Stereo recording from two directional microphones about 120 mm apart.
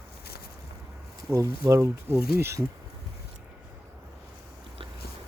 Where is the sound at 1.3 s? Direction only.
25° right (ahead or behind).